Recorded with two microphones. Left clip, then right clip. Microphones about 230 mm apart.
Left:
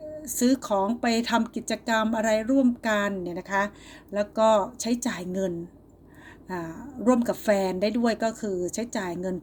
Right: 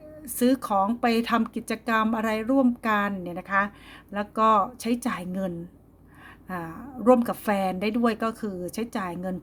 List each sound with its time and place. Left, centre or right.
0.3 s speech: right
1.4 s speech: right
1.6 s speech: right